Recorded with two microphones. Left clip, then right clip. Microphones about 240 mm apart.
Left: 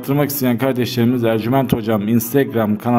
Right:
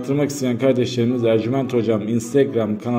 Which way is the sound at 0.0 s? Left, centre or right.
Left.